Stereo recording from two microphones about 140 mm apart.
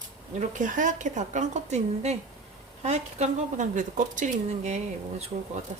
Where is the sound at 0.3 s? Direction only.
65° right (ahead or behind).